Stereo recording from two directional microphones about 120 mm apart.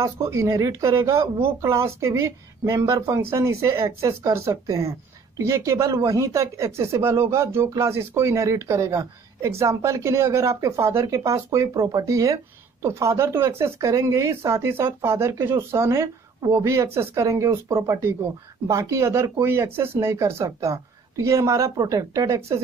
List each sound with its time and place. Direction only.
0.0 s speech: 25° right (ahead or behind)